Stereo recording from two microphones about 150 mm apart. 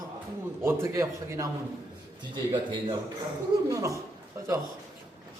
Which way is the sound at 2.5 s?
35° right (ahead or behind).